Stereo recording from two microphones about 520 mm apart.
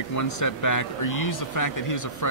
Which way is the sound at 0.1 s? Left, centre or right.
Left.